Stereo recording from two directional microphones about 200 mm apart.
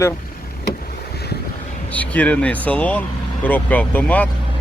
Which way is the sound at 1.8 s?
5° left (ahead or behind).